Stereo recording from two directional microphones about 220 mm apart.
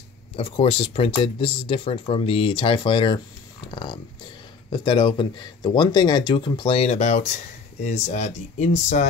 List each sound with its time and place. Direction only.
0.4 s speech: 25° left (ahead or behind)